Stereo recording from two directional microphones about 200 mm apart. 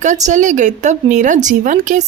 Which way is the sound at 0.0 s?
35° right (ahead or behind).